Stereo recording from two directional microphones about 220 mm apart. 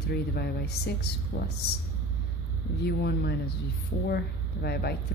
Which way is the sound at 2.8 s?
45° left (ahead or behind).